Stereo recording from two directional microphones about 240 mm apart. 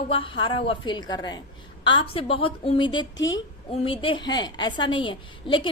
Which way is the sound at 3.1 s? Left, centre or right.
Left.